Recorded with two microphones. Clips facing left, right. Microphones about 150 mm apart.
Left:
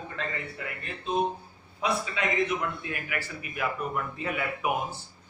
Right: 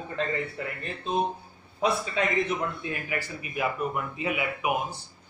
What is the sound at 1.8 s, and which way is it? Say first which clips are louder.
A man's voice: right 3 dB; 35° right (ahead or behind).